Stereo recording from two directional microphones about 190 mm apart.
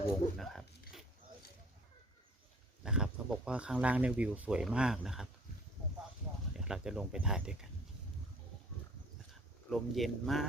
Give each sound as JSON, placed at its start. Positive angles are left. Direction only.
{"t": 0.1, "sound": "speech", "side_deg": 0}
{"t": 2.8, "sound": "speech", "side_deg": -5}
{"t": 6.5, "sound": "speech", "side_deg": -5}
{"t": 9.6, "sound": "speech", "side_deg": 0}